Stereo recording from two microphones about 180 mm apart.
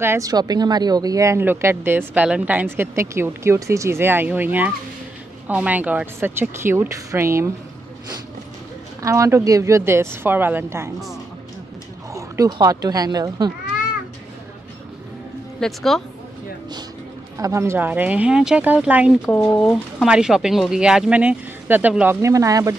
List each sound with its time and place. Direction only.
0.0 s a woman's voice: 15° right (ahead or behind)
9.0 s a woman's voice: 15° right (ahead or behind)
12.1 s speech: 20° right (ahead or behind)
15.6 s speech: centre (ahead or behind)
17.4 s a woman's voice: 15° right (ahead or behind)